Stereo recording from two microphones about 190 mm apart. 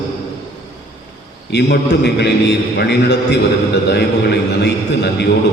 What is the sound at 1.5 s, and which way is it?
A man's voice, 60° left (ahead or behind).